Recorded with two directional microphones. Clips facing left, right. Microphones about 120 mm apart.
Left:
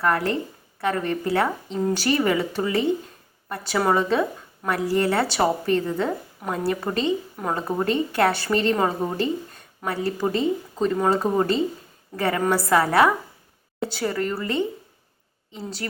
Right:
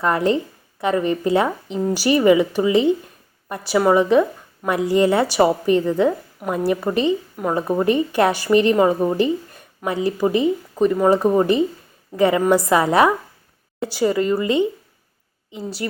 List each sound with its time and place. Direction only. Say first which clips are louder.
0.0 s a woman's voice: right 4 dB; 20° right (ahead or behind)